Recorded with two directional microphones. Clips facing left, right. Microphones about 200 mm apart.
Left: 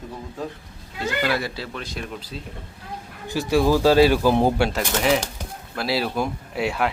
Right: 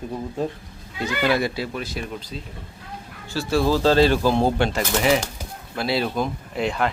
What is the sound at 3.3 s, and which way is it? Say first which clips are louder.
Speech: left 2 dB; 15° left (ahead or behind).